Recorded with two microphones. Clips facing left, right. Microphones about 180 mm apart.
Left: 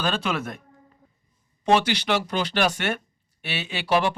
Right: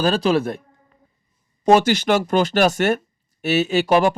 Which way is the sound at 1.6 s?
45° right (ahead or behind).